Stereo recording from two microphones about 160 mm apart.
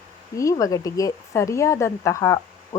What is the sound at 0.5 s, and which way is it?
A woman's voice, 20° left (ahead or behind).